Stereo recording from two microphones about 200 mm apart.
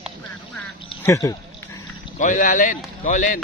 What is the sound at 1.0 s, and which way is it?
Speech, 15° left (ahead or behind).